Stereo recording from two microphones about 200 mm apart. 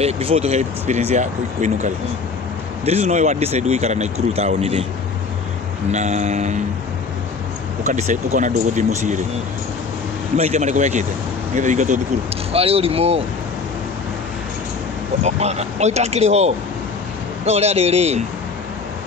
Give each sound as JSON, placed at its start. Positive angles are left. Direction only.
{"t": 0.0, "sound": "speech", "side_deg": -30}
{"t": 5.9, "sound": "speech", "side_deg": -35}
{"t": 7.8, "sound": "speech", "side_deg": -40}
{"t": 10.3, "sound": "speech", "side_deg": -35}
{"t": 15.2, "sound": "speech", "side_deg": -35}